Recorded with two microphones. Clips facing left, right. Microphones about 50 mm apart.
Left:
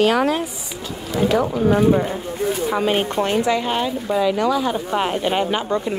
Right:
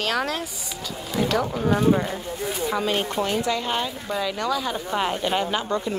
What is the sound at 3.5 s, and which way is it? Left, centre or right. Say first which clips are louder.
Speech: left 5 dB; centre.